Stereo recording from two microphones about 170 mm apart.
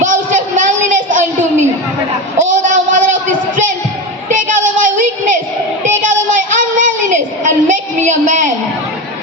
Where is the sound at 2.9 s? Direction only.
45° right (ahead or behind).